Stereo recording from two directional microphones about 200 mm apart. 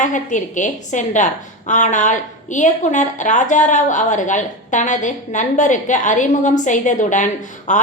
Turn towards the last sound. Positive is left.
turn(degrees=40)  # may be behind; listen again after turning